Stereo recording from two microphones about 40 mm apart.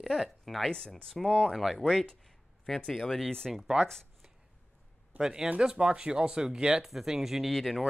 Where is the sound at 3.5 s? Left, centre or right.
Centre.